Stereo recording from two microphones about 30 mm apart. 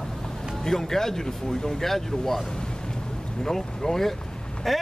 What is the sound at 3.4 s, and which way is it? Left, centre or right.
Speech, centre.